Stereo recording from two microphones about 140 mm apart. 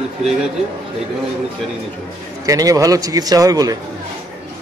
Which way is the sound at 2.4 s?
25° right (ahead or behind).